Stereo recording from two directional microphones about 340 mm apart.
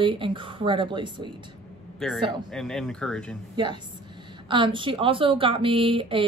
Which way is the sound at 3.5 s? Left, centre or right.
Centre.